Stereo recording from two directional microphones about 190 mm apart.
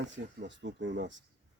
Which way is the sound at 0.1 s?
70° right (ahead or behind).